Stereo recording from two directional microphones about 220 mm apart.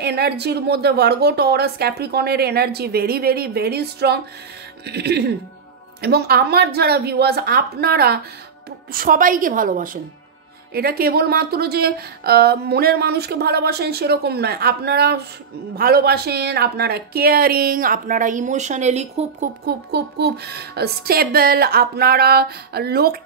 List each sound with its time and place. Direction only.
0.0 s a woman's voice: 50° right (ahead or behind); by 19.5 s 30° right (ahead or behind)
19.6 s speech: 45° right (ahead or behind)